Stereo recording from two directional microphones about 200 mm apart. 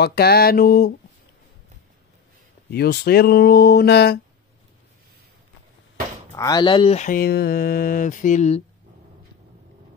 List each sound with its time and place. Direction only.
0.0 s speech: 50° left (ahead or behind)
2.7 s speech: 50° left (ahead or behind)
6.3 s speech: 20° left (ahead or behind); by 8.6 s 35° left (ahead or behind)